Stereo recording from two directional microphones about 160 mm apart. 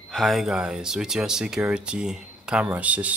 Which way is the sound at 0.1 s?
Centre (ahead or behind).